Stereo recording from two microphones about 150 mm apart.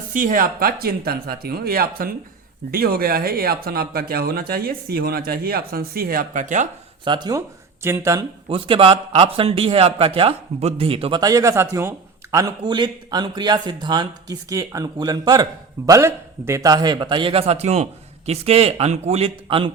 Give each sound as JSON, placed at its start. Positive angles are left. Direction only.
{"t": 0.1, "sound": "speech", "side_deg": -65}
{"t": 2.7, "sound": "speech", "side_deg": -90}
{"t": 7.0, "sound": "speech", "side_deg": -30}
{"t": 8.4, "sound": "a man's voice", "side_deg": -35}